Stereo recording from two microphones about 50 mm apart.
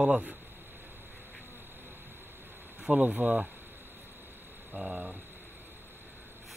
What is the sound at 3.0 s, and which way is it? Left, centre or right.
Speech, right.